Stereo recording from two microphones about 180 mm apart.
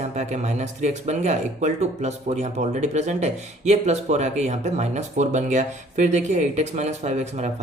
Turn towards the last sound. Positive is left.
turn(degrees=-40)  # may be behind; listen again after turning